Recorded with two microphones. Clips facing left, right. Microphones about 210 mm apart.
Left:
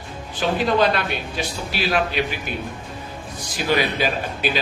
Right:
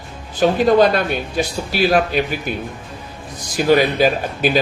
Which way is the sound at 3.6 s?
45° right (ahead or behind).